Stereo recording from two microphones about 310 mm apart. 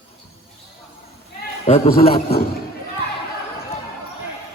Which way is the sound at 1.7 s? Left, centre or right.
Left.